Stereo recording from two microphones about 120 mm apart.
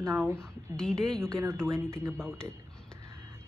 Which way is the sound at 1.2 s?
20° right (ahead or behind).